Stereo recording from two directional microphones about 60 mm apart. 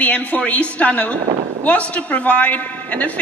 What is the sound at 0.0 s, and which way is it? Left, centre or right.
A woman's voice, left.